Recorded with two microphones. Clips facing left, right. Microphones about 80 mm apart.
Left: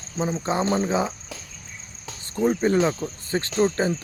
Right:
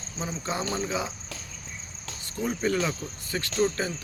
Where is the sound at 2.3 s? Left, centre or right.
Left.